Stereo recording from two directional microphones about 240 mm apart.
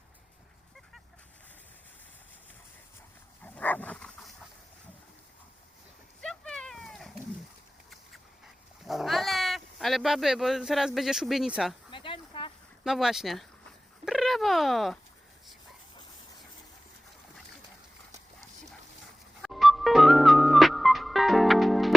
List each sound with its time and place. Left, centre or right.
3.4 s dog: centre
6.2 s cat: centre
8.8 s speech: centre
11.9 s a sound: left
12.8 s speech: centre
14.0 s cat: centre
19.4 s music: centre